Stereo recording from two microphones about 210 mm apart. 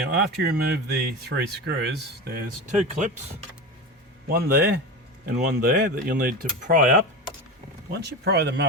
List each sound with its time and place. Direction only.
0.1 s speech: 50° right (ahead or behind)
2.8 s speech: 35° right (ahead or behind)
4.3 s speech: 50° right (ahead or behind)
8.0 s speech: 50° right (ahead or behind)